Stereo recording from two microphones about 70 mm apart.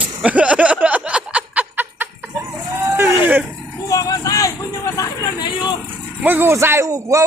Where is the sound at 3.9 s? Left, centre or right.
Left.